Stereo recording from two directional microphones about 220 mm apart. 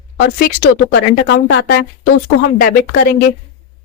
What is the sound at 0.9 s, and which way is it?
Speech, 55° left (ahead or behind).